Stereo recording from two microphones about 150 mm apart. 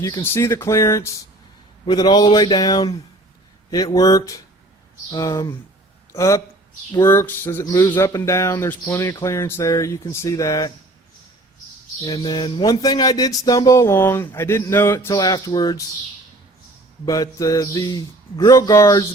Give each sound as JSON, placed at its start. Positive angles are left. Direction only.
{"t": 0.3, "sound": "speech", "side_deg": 20}
{"t": 12.0, "sound": "speech", "side_deg": 25}
{"t": 17.1, "sound": "speech", "side_deg": 25}